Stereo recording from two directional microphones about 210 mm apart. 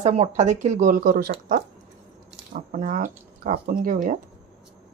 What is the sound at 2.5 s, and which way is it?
Speech, 40° right (ahead or behind).